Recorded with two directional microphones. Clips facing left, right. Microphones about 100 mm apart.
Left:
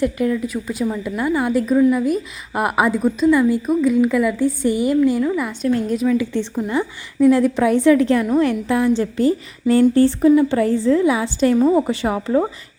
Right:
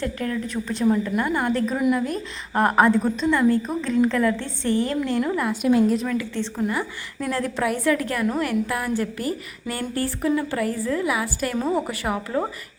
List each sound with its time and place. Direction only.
0.0 s a woman's voice: 15° left (ahead or behind)
5.2 s a woman's voice: 5° right (ahead or behind)
6.1 s a woman's voice: 15° left (ahead or behind)